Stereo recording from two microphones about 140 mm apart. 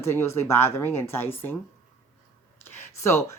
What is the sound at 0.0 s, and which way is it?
A woman's voice, 20° left (ahead or behind).